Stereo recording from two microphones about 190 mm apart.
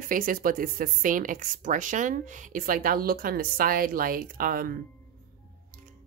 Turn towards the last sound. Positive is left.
turn(degrees=-50)  # may be behind; listen again after turning